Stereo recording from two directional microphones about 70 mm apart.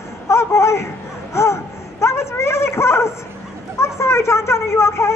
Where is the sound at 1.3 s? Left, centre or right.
Left.